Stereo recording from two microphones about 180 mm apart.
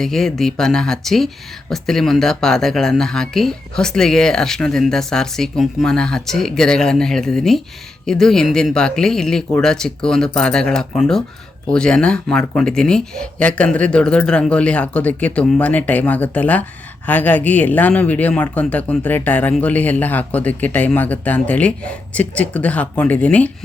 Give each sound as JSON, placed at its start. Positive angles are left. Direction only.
{"t": 0.0, "sound": "speech", "side_deg": 0}